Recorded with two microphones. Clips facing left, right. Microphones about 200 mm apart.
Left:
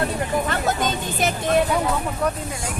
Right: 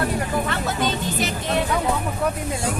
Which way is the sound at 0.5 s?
45° left (ahead or behind).